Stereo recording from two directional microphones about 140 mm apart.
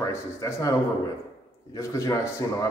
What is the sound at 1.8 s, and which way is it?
Speech, 20° left (ahead or behind).